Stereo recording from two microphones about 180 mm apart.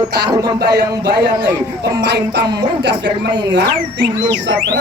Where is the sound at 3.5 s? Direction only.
70° right (ahead or behind).